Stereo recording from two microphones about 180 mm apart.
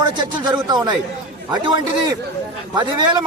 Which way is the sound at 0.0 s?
25° right (ahead or behind).